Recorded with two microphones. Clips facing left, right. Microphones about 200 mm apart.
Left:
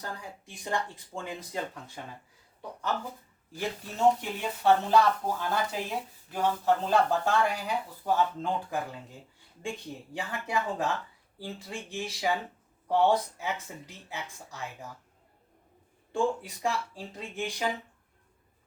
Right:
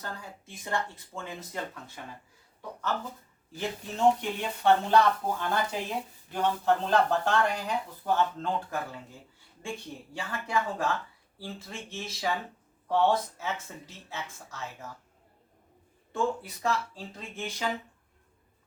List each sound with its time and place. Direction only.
0.0 s speech: 15° left (ahead or behind)
2.0 s speech: 30° left (ahead or behind)
2.6 s speech: 15° left (ahead or behind)
10.2 s speech: 15° left (ahead or behind)
16.1 s speech: 15° left (ahead or behind)